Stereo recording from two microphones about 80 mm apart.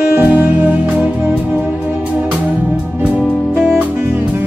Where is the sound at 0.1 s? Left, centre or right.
Right.